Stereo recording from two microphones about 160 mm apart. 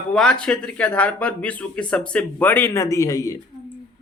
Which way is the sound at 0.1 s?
5° left (ahead or behind).